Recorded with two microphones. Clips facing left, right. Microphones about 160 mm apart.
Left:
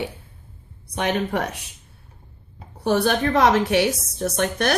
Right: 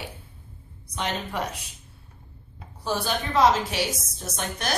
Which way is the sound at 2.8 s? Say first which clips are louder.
Left 8 dB; 65° left (ahead or behind).